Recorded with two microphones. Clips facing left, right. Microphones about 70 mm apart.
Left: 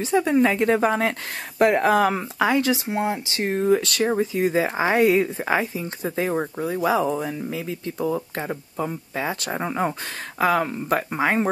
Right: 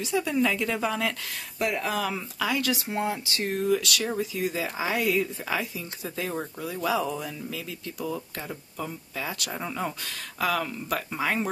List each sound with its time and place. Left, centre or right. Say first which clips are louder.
0.0 s speech: left 6 dB; left